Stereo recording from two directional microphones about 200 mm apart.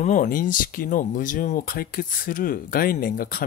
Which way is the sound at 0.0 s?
40° left (ahead or behind).